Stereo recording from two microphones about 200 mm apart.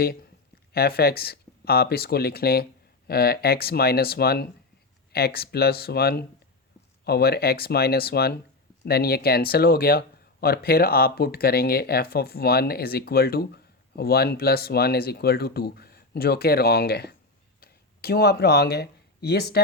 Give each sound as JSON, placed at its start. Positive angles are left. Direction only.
{"t": 0.7, "sound": "speech", "side_deg": 50}